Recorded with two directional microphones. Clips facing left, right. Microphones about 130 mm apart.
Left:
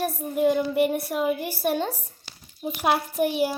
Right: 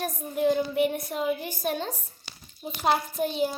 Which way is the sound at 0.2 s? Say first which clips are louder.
Left 2 dB; 5° left (ahead or behind).